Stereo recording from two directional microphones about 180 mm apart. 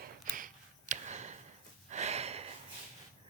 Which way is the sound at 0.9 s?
45° right (ahead or behind).